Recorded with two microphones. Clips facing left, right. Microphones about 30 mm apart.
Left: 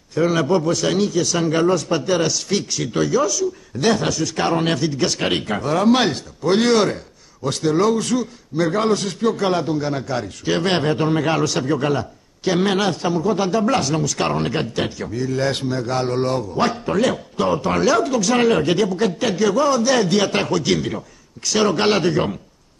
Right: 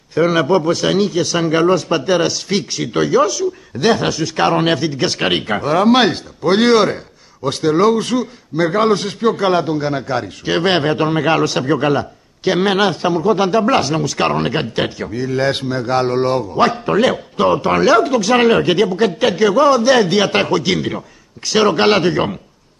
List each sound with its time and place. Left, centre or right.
0.1 s a man's voice: right